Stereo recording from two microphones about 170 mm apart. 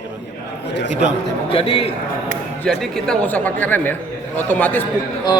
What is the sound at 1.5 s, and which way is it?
Speech, 35° left (ahead or behind).